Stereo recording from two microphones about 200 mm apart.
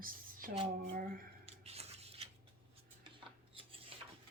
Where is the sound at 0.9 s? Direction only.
45° right (ahead or behind).